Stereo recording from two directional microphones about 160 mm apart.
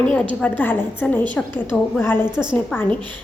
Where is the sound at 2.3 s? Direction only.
5° right (ahead or behind).